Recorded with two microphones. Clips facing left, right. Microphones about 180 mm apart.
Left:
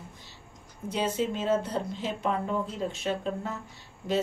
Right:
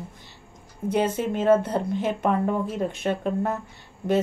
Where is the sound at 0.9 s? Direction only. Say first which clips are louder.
Right 5 dB; 55° right (ahead or behind).